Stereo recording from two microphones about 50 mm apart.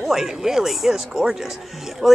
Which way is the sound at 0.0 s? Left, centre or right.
Centre.